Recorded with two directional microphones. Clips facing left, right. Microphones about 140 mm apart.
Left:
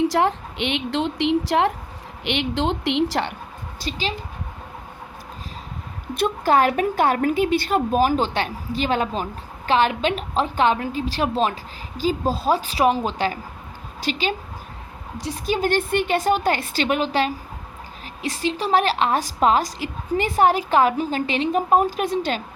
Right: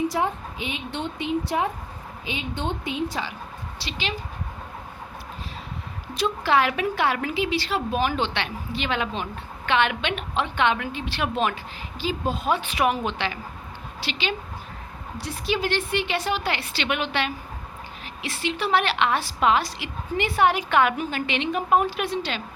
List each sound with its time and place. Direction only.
0.1 s a woman's voice: 90° left
3.8 s a woman's voice: 40° left (ahead or behind)
6.1 s a woman's voice: 50° left (ahead or behind)